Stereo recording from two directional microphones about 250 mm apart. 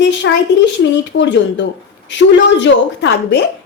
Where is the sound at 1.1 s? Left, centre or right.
Left.